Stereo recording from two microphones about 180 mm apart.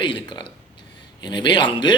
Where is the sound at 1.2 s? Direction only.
25° left (ahead or behind).